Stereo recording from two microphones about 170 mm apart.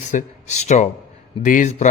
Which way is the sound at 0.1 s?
45° left (ahead or behind).